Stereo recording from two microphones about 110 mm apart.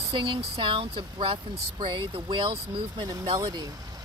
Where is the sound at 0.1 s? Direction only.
45° right (ahead or behind).